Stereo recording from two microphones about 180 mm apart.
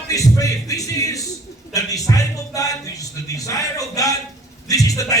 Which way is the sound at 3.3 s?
20° left (ahead or behind).